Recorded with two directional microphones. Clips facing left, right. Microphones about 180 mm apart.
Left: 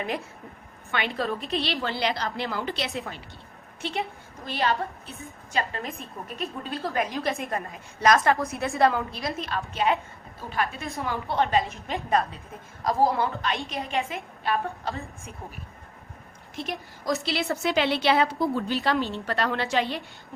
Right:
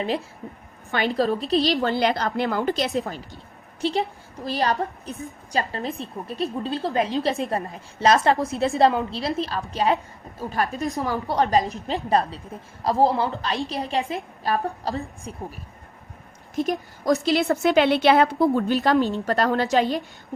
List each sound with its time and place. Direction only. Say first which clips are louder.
0.9 s a woman's voice: right 6 dB; 35° right (ahead or behind)
17.2 s a woman's voice: right 7 dB; 55° right (ahead or behind)
18.8 s a woman's voice: right 6 dB; 45° right (ahead or behind)